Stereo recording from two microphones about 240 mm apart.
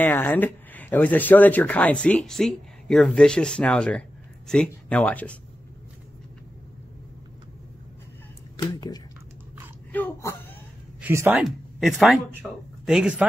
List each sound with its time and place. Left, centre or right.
0.0 s speech: centre
8.5 s speech: centre
11.0 s speech: centre